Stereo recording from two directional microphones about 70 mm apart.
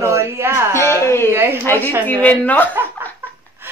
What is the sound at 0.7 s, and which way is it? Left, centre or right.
Speech, left.